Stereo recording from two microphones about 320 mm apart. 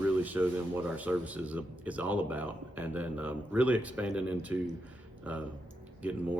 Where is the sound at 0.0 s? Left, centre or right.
Centre.